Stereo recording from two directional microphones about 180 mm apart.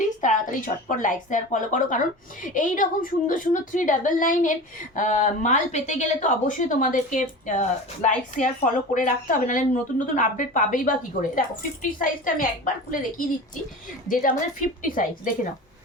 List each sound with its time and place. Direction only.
0.2 s a woman's voice: 45° left (ahead or behind)